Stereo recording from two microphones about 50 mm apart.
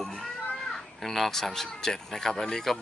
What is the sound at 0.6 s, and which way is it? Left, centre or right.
Crow, centre.